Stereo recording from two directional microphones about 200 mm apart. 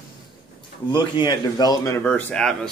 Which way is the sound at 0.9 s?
25° left (ahead or behind).